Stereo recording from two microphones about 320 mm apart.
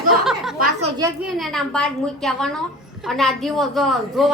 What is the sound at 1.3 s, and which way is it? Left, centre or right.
Speech, centre.